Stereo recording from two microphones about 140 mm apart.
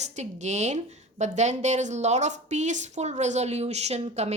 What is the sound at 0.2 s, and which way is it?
A woman's voice, 55° right (ahead or behind).